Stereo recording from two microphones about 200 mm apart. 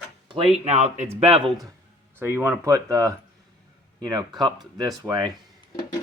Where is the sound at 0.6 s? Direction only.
35° right (ahead or behind).